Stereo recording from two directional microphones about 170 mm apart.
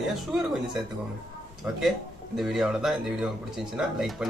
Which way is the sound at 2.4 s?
Centre (ahead or behind).